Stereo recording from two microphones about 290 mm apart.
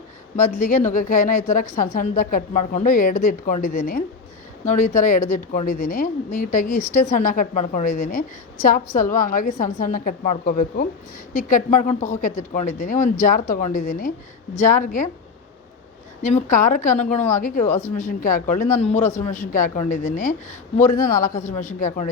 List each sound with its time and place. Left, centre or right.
0.3 s a woman's voice: left
16.2 s a woman's voice: left